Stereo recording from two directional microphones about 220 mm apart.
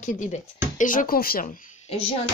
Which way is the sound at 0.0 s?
35° left (ahead or behind).